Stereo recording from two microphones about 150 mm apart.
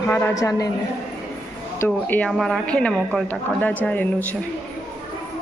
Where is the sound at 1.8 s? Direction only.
10° left (ahead or behind).